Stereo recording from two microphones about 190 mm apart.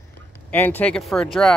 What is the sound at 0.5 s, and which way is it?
Speech, 10° left (ahead or behind).